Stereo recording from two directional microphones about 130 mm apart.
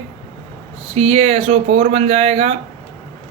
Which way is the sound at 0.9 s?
55° right (ahead or behind).